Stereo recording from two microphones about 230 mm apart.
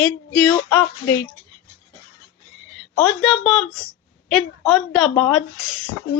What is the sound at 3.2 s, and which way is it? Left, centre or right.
A woman's voice, centre.